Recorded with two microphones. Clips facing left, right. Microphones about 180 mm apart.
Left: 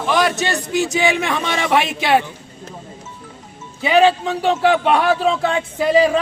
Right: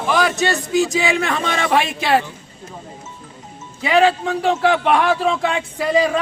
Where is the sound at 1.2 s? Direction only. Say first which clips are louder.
Even; 15° left (ahead or behind).